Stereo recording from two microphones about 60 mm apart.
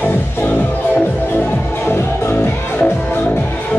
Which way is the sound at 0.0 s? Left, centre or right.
Left.